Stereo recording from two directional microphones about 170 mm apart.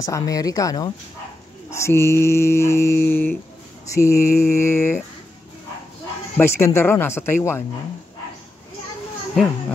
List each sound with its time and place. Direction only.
0.0 s speech: 20° left (ahead or behind)
6.3 s speech: 15° left (ahead or behind)